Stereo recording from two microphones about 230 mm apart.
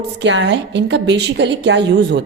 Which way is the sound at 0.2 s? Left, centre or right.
Right.